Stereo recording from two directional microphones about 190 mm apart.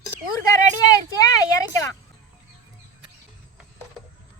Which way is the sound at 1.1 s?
20° left (ahead or behind).